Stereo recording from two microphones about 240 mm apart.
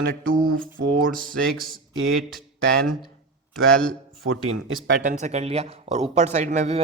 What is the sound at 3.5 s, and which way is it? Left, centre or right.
Speech, centre.